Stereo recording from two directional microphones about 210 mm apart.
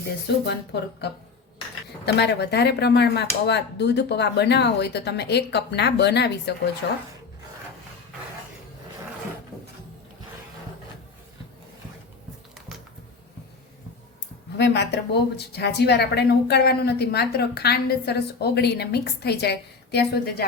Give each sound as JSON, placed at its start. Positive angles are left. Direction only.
{"t": 0.4, "sound": "a woman's voice", "side_deg": 50}
{"t": 14.6, "sound": "a woman's voice", "side_deg": 55}